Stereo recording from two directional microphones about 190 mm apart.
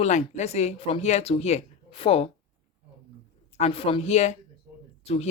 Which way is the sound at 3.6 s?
30° left (ahead or behind).